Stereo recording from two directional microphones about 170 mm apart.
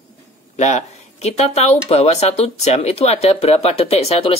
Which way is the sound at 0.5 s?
45° left (ahead or behind).